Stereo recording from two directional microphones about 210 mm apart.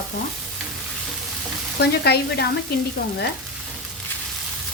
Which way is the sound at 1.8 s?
50° left (ahead or behind).